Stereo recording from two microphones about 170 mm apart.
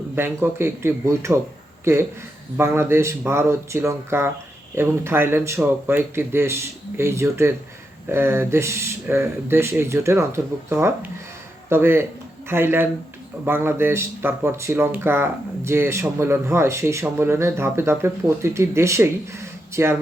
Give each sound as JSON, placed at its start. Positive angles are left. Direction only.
{"t": 0.2, "sound": "speech", "side_deg": -15}